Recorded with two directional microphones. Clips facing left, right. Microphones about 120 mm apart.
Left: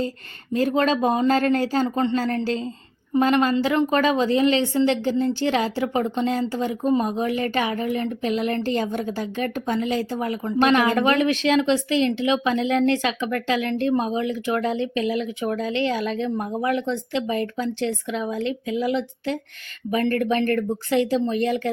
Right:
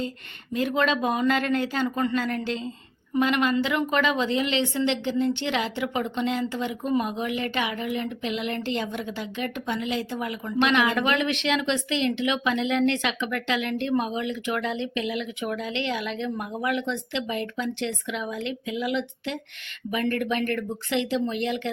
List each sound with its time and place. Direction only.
0.5 s a woman's voice: 35° left (ahead or behind)